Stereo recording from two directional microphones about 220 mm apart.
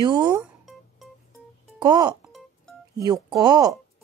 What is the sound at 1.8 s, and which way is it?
Speech, 20° right (ahead or behind).